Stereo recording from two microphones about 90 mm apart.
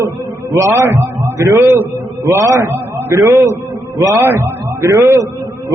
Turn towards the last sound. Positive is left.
turn(degrees=-35)  # may be behind; listen again after turning